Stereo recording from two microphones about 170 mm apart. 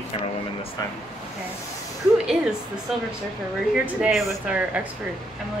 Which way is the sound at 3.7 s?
5° right (ahead or behind).